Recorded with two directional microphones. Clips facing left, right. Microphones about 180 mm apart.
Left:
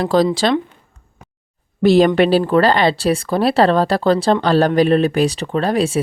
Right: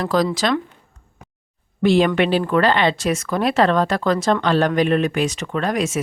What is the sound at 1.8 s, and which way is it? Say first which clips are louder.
Speech: left 4 dB; 40° left (ahead or behind).